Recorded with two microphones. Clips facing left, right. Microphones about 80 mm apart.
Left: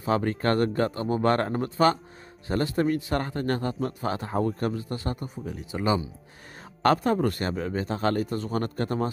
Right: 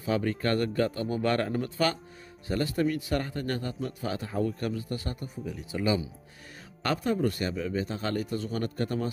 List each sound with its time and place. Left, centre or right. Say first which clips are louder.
0.0 s a man's voice: left 3 dB; left
6.8 s a man's voice: left 5 dB; left